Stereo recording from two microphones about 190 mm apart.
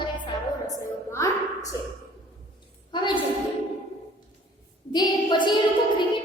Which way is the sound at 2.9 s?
25° left (ahead or behind).